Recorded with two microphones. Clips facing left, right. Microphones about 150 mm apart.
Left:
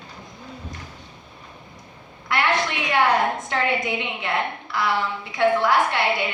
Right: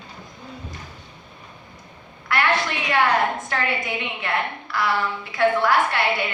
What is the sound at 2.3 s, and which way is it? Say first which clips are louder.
Speech: even; 20° left (ahead or behind).